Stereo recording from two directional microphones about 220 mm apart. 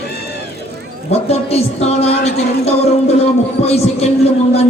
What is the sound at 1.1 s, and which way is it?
Speech, 30° left (ahead or behind).